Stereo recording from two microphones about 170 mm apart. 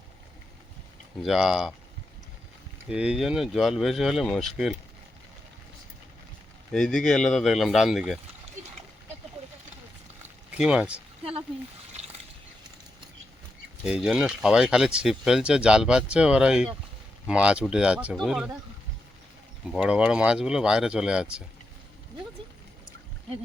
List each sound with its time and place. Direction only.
1.2 s speech: 5° right (ahead or behind)
2.9 s speech: 5° right (ahead or behind)
6.7 s speech: 5° left (ahead or behind)
8.6 s splash: 50° right (ahead or behind)
10.5 s speech: 5° right (ahead or behind)
13.8 s speech: 5° right (ahead or behind)
19.6 s speech: 5° right (ahead or behind)